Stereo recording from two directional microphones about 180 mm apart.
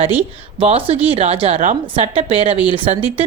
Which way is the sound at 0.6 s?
30° right (ahead or behind).